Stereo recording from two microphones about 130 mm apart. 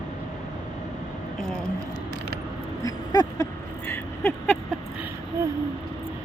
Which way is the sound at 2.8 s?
25° left (ahead or behind).